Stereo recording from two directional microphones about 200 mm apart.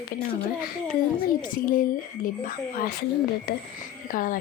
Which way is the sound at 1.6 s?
45° left (ahead or behind).